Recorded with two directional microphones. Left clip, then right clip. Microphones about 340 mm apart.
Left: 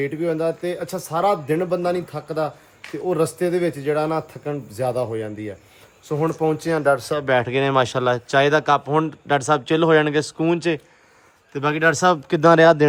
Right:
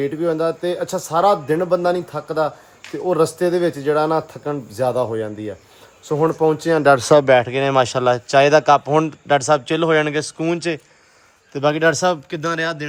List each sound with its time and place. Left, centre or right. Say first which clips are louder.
0.0 s speech: right 3 dB; centre
7.3 s speech: right 4 dB; centre